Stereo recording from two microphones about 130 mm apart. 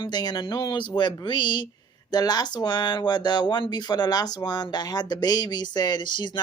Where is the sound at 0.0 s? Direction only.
30° left (ahead or behind).